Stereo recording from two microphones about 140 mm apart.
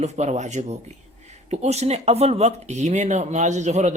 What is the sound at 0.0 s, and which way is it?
Speech, 55° right (ahead or behind).